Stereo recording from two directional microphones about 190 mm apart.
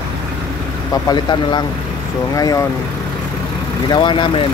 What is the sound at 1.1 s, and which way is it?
Speech, 25° left (ahead or behind).